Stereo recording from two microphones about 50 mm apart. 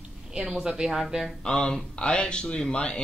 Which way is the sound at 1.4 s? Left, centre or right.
Centre.